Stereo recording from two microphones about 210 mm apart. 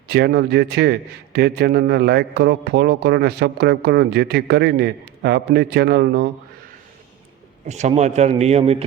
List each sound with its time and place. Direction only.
0.1 s a man's voice: 50° right (ahead or behind)
7.7 s a man's voice: 35° right (ahead or behind)